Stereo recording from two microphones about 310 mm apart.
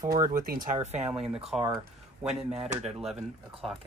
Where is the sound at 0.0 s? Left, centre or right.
Centre.